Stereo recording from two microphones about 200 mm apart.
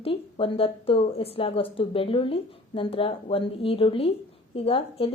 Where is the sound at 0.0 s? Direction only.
25° left (ahead or behind).